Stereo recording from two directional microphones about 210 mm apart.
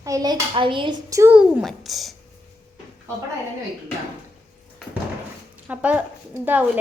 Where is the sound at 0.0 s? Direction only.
15° right (ahead or behind); by 2.1 s centre (ahead or behind).